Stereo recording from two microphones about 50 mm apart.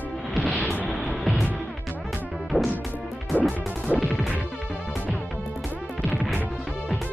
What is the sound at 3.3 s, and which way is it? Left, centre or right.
Music, left.